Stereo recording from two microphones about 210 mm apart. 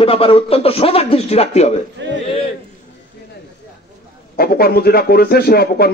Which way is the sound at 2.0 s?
60° right (ahead or behind).